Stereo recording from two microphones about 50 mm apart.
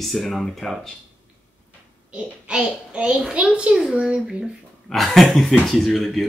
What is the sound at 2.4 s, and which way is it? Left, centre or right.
A child's voice, right.